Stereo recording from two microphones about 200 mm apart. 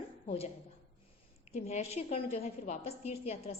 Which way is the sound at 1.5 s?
35° left (ahead or behind).